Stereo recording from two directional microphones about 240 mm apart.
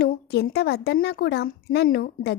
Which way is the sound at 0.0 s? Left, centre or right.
Left.